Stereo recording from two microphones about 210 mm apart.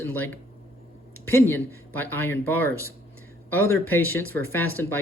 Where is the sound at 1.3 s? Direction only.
10° left (ahead or behind).